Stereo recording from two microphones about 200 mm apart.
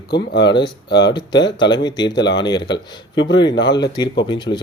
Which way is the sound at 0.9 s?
20° left (ahead or behind).